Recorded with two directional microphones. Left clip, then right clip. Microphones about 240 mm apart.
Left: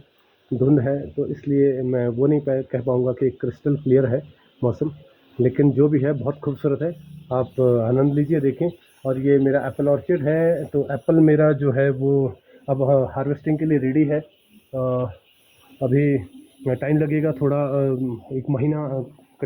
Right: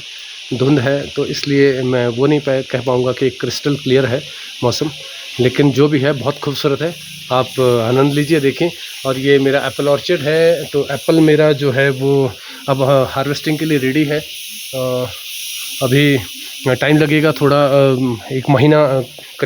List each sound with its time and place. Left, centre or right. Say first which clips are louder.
0.7 s speech: right 6 dB; right
12.1 s speech: right 6 dB; right
15.9 s speech: right 7 dB; right
18.4 s speech: right 15 dB; right